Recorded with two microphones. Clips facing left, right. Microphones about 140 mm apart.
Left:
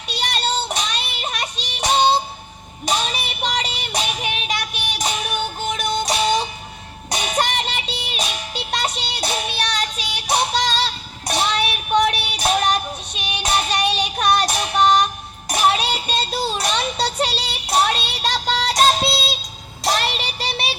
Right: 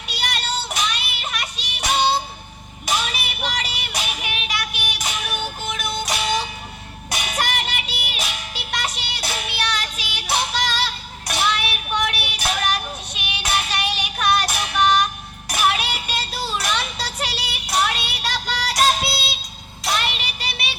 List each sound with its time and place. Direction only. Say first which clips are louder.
0.1 s music: left 4 dB; 25° left (ahead or behind)
2.8 s child singing: left 2 dB; 20° left (ahead or behind)
7.1 s music: left 3 dB; 20° left (ahead or behind)
19.8 s child singing: left 3 dB; 40° left (ahead or behind)